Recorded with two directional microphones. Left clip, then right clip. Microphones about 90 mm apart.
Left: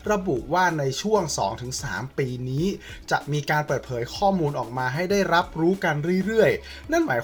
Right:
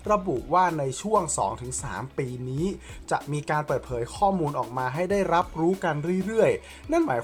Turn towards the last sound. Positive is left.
turn(degrees=-35)  # may be behind; listen again after turning